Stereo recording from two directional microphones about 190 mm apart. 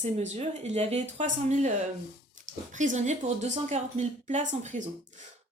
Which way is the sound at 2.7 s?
40° right (ahead or behind).